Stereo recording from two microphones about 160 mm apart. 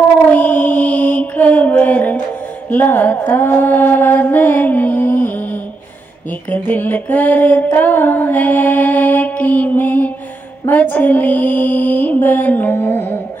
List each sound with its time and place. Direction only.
0.3 s mantra: 10° left (ahead or behind)
6.5 s mantra: 10° left (ahead or behind)